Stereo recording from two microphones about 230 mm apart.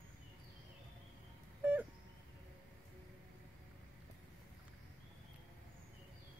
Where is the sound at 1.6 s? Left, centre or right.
Centre.